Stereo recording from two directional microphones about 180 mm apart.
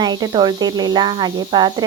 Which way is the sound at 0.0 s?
25° right (ahead or behind).